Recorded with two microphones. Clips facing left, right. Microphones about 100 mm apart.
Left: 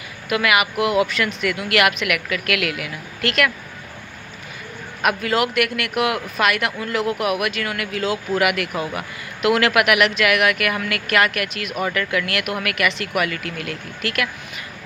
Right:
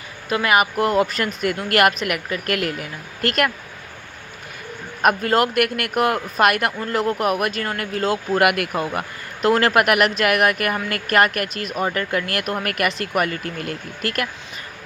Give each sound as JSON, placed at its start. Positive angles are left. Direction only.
{"t": 0.3, "sound": "speech", "side_deg": -35}
{"t": 5.0, "sound": "speech", "side_deg": -45}
{"t": 8.7, "sound": "speech", "side_deg": 0}
{"t": 9.0, "sound": "speech", "side_deg": -40}